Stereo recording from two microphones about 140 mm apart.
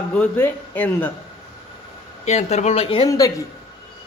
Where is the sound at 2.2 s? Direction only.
50° left (ahead or behind).